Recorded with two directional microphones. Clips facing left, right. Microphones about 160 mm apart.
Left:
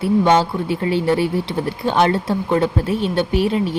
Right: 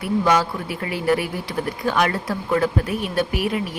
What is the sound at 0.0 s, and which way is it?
Speech, 30° left (ahead or behind).